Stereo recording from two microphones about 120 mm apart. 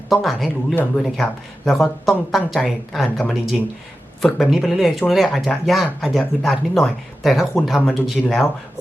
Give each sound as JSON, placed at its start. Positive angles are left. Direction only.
{"t": 0.1, "sound": "speech", "side_deg": 0}